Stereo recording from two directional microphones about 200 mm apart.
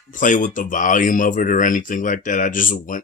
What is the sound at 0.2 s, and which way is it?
Speech, 40° left (ahead or behind).